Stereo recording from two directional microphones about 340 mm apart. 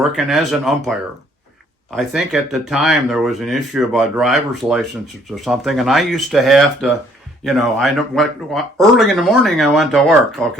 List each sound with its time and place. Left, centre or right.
0.0 s speech: centre
2.0 s speech: centre